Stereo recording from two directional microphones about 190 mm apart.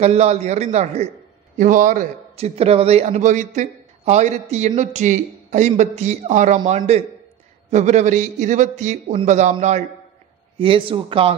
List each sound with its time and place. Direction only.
0.0 s a man's voice: 35° right (ahead or behind)